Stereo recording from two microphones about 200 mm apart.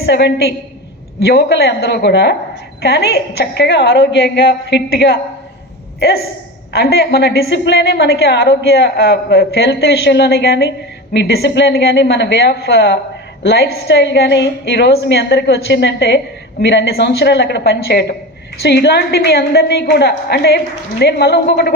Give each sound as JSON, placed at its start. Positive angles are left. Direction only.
{"t": 0.0, "sound": "a woman's voice", "side_deg": 55}